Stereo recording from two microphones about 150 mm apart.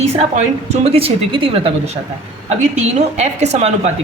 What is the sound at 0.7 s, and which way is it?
A woman's voice, 40° right (ahead or behind).